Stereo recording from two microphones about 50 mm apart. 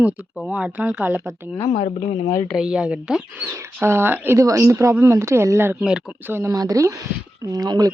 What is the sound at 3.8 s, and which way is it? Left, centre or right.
Speech, right.